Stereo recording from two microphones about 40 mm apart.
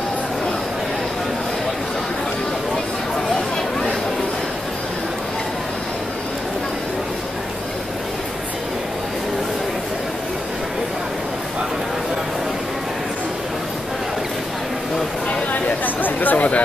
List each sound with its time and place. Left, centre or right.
15.8 s chatter: left